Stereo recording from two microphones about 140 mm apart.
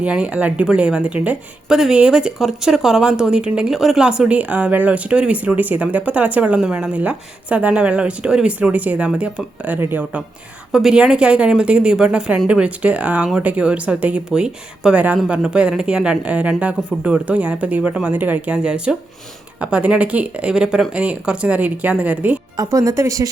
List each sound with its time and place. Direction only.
0.0 s a woman's voice: 10° right (ahead or behind)
22.5 s a woman's voice: 25° right (ahead or behind)